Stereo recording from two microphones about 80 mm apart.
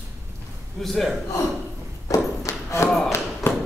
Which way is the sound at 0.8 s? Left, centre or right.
Centre.